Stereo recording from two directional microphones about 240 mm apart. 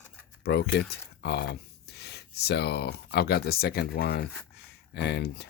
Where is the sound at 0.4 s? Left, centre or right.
Left.